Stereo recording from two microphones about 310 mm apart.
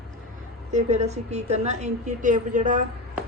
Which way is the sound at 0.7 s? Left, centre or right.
Right.